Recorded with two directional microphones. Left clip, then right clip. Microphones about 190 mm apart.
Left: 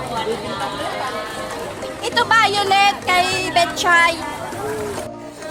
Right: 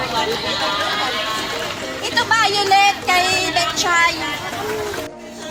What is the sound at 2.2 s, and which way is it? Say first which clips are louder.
Music: left 1 dB; 65° left (ahead or behind).